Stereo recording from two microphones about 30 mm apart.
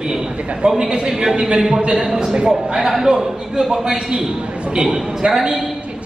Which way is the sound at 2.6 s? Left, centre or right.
Right.